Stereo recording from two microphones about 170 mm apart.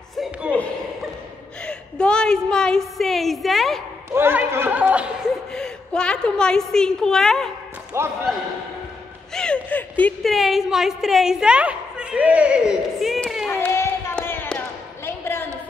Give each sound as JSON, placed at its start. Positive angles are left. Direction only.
{"t": 0.1, "sound": "a sound", "side_deg": 0}
{"t": 1.6, "sound": "a woman's voice", "side_deg": 5}
{"t": 4.1, "sound": "speech", "side_deg": -10}
{"t": 5.5, "sound": "a woman's voice", "side_deg": 5}
{"t": 7.9, "sound": "speech", "side_deg": -15}
{"t": 9.3, "sound": "a woman's voice", "side_deg": 5}
{"t": 13.5, "sound": "a sound", "side_deg": 15}